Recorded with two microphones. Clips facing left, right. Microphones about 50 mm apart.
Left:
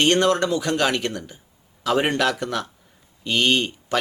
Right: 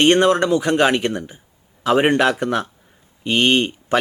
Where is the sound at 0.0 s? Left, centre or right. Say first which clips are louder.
Right 4 dB; right.